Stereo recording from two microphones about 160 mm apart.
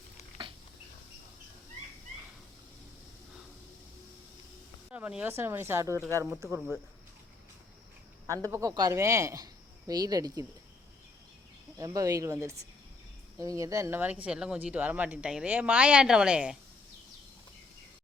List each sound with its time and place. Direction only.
4.9 s speech: 10° right (ahead or behind)
8.3 s speech: 20° right (ahead or behind)
11.8 s speech: 20° right (ahead or behind)